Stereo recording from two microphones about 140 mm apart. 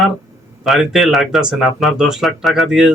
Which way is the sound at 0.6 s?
Centre (ahead or behind).